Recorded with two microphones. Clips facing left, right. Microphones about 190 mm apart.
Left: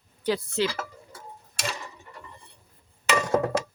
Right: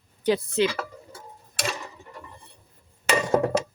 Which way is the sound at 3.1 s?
30° right (ahead or behind).